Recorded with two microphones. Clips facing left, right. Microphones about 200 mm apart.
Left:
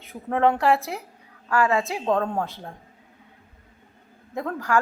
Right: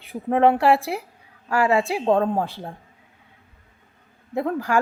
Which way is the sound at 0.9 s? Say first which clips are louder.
Right 5 dB; 15° right (ahead or behind).